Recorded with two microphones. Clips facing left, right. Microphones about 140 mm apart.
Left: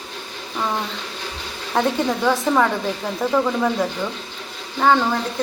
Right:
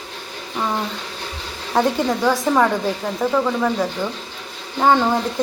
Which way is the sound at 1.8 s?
5° right (ahead or behind).